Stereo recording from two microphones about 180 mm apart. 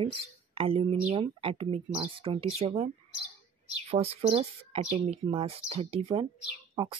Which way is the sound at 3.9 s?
35° right (ahead or behind).